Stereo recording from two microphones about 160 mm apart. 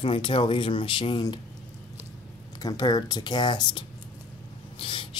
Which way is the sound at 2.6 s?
25° left (ahead or behind).